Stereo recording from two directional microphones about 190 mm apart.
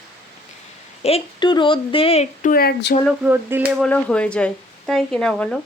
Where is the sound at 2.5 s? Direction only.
55° left (ahead or behind).